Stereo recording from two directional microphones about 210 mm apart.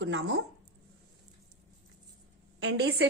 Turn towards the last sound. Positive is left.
turn(degrees=-50)  # may be behind; listen again after turning